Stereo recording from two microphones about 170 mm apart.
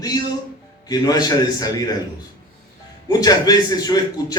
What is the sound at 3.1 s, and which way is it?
A man's voice, 20° left (ahead or behind).